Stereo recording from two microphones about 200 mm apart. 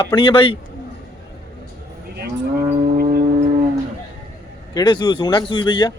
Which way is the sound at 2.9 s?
50° right (ahead or behind).